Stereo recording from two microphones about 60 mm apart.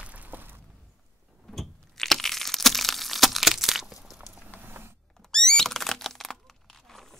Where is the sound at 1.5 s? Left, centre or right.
Centre.